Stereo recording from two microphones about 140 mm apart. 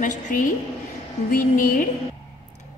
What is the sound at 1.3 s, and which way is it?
Music, 75° left (ahead or behind).